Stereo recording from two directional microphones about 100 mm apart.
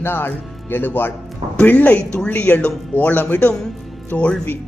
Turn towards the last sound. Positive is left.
turn(degrees=15)  # may be behind; listen again after turning